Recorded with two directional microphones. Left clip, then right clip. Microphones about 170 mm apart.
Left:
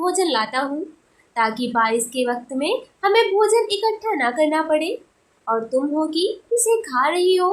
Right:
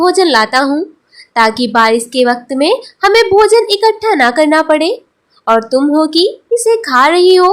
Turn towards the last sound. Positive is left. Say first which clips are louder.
# right 11 dB
turn(degrees=-50)  # may be behind; listen again after turning